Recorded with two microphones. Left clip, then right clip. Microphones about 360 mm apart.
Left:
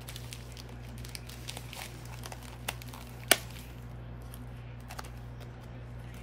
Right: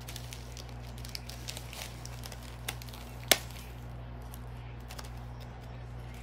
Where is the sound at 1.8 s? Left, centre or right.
Centre.